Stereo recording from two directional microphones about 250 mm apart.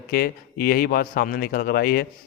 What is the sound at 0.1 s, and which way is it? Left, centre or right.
Speech, left.